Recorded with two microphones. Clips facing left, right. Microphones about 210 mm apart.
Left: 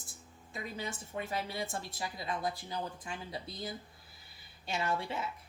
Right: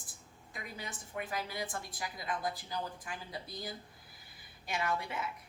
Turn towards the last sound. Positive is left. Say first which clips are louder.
# left 1 dB
turn(degrees=30)  # may be behind; listen again after turning